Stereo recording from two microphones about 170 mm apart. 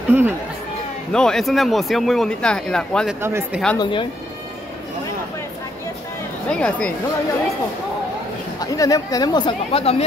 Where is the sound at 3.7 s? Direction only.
30° left (ahead or behind).